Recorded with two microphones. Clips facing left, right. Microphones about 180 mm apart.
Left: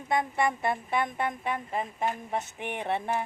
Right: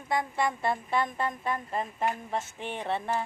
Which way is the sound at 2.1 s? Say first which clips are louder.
Left 1 dB; 15° left (ahead or behind).